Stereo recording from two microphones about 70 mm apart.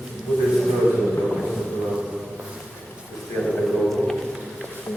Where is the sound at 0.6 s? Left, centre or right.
Centre.